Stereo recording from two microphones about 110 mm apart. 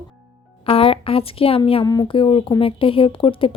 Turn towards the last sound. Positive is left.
turn(degrees=55)  # may be behind; listen again after turning